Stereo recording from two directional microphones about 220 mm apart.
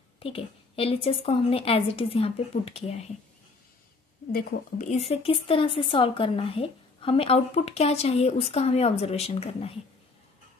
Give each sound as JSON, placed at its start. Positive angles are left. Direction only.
{"t": 0.2, "sound": "a woman's voice", "side_deg": 25}
{"t": 4.3, "sound": "a woman's voice", "side_deg": 40}